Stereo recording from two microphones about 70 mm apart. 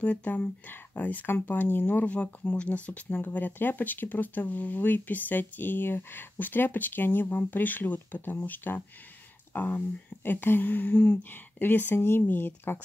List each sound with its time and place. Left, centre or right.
0.0 s speech: left